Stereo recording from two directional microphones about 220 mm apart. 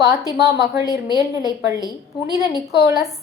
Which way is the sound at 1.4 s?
20° right (ahead or behind).